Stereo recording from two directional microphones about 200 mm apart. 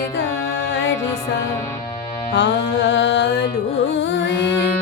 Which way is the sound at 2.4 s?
65° left (ahead or behind).